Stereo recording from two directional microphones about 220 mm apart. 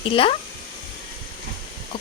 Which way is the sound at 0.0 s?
25° left (ahead or behind).